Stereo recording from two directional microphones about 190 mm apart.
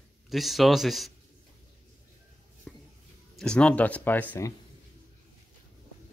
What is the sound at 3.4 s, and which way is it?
Speech, 5° left (ahead or behind).